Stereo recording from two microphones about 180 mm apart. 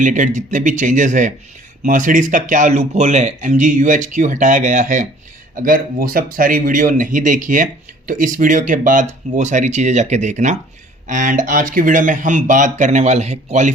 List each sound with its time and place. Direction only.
0.0 s speech: 45° right (ahead or behind)